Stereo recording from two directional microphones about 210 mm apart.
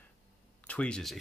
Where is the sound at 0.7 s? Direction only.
5° left (ahead or behind).